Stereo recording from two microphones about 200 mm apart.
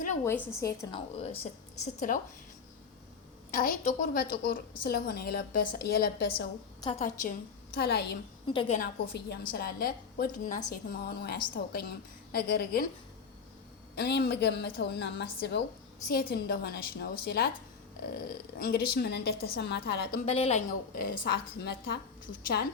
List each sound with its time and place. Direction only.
0.3 s a woman's voice: 15° left (ahead or behind); by 2.1 s 35° left (ahead or behind)
3.5 s a woman's voice: 40° left (ahead or behind)
7.0 s a woman's voice: 40° left (ahead or behind)
8.4 s a woman's voice: 25° left (ahead or behind)
9.1 s a woman's voice: 50° left (ahead or behind)
10.7 s a woman's voice: 50° left (ahead or behind)
13.9 s a woman's voice: 55° left (ahead or behind)
20.2 s a woman's voice: 30° left (ahead or behind); by 21.9 s 50° left (ahead or behind)